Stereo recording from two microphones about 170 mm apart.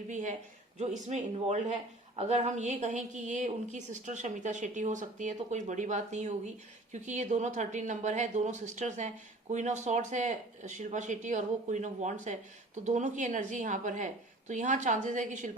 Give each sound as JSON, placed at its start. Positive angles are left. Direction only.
{"t": 0.1, "sound": "speech", "side_deg": -45}